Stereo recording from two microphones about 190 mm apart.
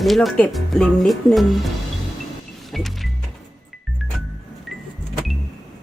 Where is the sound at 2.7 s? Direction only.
Centre (ahead or behind).